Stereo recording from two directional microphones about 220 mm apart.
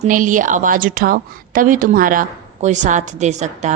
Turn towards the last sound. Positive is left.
turn(degrees=-30)  # may be behind; listen again after turning